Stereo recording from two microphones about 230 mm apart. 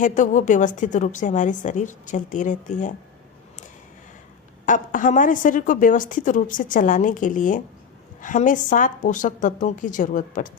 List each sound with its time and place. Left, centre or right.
0.0 s a woman's voice: left
4.6 s a woman's voice: left